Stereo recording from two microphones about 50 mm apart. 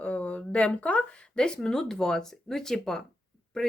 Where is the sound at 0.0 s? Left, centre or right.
Left.